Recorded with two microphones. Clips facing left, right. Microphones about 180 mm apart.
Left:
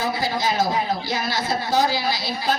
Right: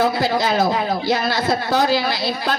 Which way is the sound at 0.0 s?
65° right (ahead or behind).